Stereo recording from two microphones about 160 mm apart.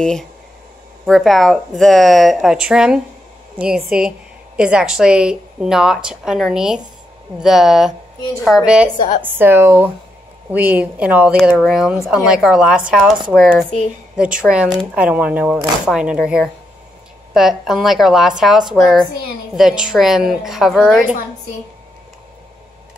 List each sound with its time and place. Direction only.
0.0 s speech: 5° left (ahead or behind)
8.9 s a woman's voice: 55° left (ahead or behind)
9.2 s speech: 15° right (ahead or behind); by 21.0 s centre (ahead or behind)